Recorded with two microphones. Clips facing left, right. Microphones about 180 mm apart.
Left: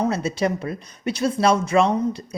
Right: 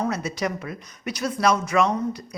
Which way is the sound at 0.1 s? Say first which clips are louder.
Left 4 dB; 30° left (ahead or behind).